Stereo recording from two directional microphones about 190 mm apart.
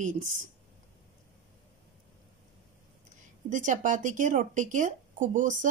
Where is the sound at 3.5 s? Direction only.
40° right (ahead or behind).